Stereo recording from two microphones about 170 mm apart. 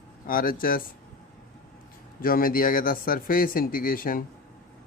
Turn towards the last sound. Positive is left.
turn(degrees=55)  # may be behind; listen again after turning